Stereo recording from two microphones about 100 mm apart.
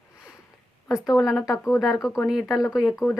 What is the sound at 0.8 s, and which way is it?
Speech, 30° left (ahead or behind).